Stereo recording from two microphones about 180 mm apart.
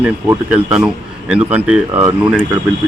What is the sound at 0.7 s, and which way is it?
Speech, 5° right (ahead or behind).